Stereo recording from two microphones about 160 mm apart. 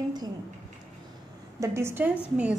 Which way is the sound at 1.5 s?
20° right (ahead or behind).